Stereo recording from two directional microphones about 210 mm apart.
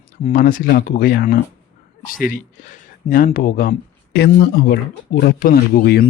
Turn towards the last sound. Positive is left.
turn(degrees=45)  # may be behind; listen again after turning